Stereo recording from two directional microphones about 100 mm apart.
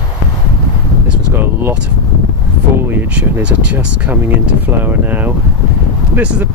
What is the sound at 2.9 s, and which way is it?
Speech, 15° right (ahead or behind).